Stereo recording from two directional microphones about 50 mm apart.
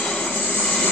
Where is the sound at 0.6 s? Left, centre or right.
Centre.